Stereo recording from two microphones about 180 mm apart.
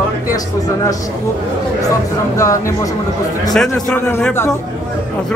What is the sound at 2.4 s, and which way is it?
Speech, 15° left (ahead or behind).